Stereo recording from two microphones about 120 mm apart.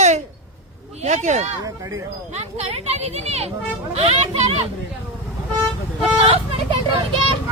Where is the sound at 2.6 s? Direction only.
65° right (ahead or behind).